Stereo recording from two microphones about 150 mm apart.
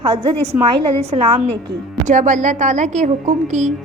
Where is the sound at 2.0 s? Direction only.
60° right (ahead or behind).